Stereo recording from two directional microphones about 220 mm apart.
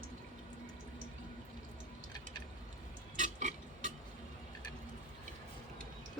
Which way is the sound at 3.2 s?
35° right (ahead or behind).